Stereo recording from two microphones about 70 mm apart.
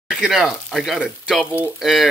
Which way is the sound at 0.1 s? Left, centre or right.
Centre.